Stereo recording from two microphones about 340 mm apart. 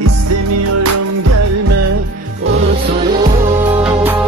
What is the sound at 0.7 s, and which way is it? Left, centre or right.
Music, right.